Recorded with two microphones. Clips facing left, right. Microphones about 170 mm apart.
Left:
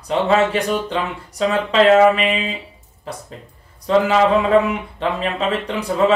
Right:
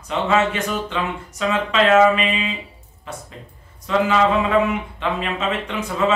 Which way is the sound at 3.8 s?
35° left (ahead or behind).